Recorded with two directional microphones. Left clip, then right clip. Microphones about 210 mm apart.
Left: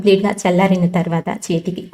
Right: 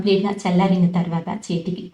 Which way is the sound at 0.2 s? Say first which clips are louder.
Left 5 dB; 30° left (ahead or behind).